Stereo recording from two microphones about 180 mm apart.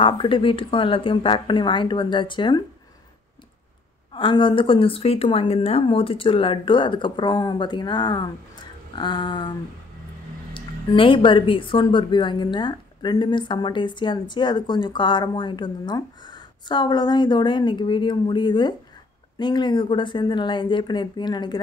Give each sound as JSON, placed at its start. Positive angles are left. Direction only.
{"t": 0.0, "sound": "speech", "side_deg": 30}
{"t": 4.1, "sound": "speech", "side_deg": 25}
{"t": 10.5, "sound": "speech", "side_deg": 30}